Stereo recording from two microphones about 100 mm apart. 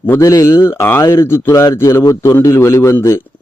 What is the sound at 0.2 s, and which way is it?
A man's voice, 30° left (ahead or behind).